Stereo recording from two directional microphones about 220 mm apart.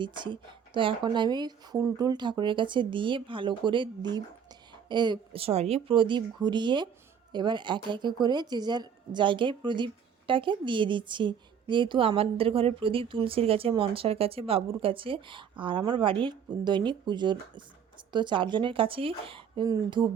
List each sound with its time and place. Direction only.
0.0 s a woman's voice: 20° right (ahead or behind)